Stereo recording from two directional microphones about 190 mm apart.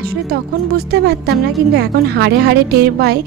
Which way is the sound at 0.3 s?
60° right (ahead or behind).